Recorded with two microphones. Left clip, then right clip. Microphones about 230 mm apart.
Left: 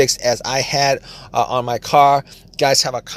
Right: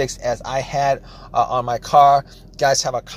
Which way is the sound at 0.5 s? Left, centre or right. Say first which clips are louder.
Right 1 dB; left.